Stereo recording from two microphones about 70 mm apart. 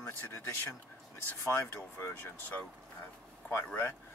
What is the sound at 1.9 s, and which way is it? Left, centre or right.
Speech, left.